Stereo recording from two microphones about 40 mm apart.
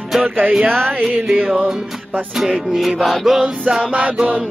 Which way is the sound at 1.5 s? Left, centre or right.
Centre.